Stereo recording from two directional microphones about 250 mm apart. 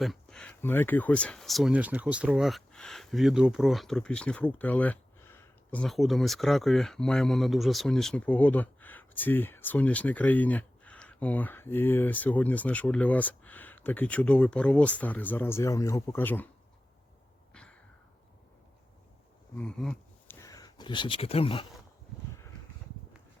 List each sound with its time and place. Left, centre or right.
0.0 s speech: centre
17.5 s a sound: centre
19.5 s speech: centre; by 21.7 s left